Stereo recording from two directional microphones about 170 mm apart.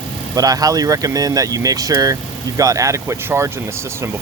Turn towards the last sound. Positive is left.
turn(degrees=-15)  # may be behind; listen again after turning